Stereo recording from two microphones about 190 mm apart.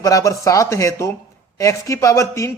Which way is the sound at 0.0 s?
15° left (ahead or behind).